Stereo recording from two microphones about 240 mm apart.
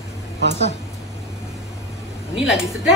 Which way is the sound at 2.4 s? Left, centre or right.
Centre.